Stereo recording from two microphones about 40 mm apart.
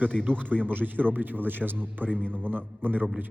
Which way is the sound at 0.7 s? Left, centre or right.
Right.